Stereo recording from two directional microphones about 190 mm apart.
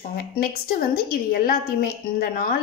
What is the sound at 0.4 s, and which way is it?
A woman's voice, 50° left (ahead or behind).